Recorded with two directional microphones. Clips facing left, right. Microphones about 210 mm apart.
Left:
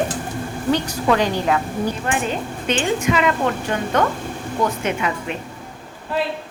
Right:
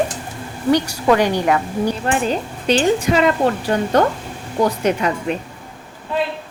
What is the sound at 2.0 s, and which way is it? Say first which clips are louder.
A woman's voice: right 3 dB; 35° right (ahead or behind).